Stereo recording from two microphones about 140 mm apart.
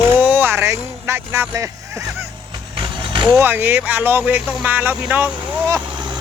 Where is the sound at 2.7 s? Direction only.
35° right (ahead or behind).